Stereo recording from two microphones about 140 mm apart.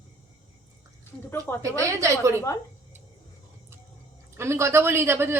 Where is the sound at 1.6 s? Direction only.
20° right (ahead or behind).